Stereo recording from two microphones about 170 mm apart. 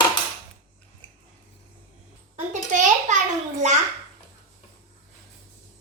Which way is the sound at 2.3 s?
45° right (ahead or behind).